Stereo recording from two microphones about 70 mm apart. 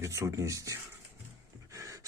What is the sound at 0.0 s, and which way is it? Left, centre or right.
Speech, right.